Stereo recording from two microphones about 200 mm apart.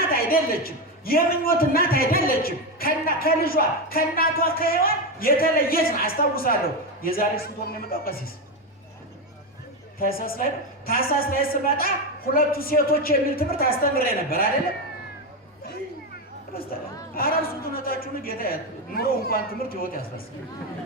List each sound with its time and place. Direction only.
0.1 s a man's voice: 45° left (ahead or behind)
10.0 s a man's voice: 45° left (ahead or behind)
17.2 s a man's voice: 45° left (ahead or behind)